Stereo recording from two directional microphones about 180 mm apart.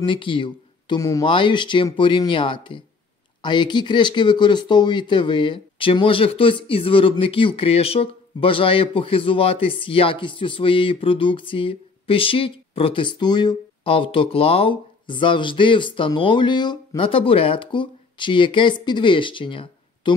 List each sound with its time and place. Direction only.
0.0 s speech: 25° left (ahead or behind)